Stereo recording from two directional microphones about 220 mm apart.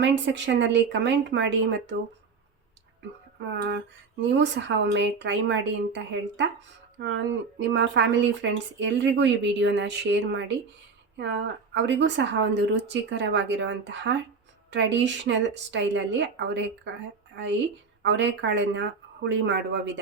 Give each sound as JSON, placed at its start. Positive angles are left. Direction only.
{"t": 0.0, "sound": "speech", "side_deg": -55}
{"t": 4.3, "sound": "speech", "side_deg": -55}
{"t": 18.0, "sound": "speech", "side_deg": -55}